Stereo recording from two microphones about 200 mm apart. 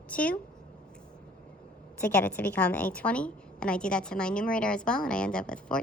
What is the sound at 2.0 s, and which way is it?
A woman's voice, 10° left (ahead or behind).